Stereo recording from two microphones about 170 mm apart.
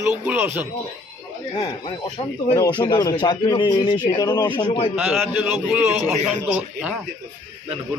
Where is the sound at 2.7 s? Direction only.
25° left (ahead or behind).